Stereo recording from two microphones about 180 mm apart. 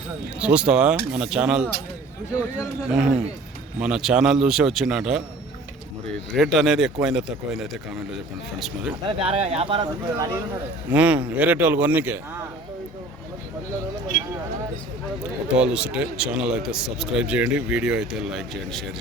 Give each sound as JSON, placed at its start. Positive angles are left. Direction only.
{"t": 0.3, "sound": "a man's voice", "side_deg": -5}
{"t": 2.8, "sound": "a man's voice", "side_deg": -5}
{"t": 6.3, "sound": "a man's voice", "side_deg": 0}
{"t": 9.0, "sound": "speech", "side_deg": -30}
{"t": 10.9, "sound": "speech", "side_deg": -5}
{"t": 15.2, "sound": "a man's voice", "side_deg": -5}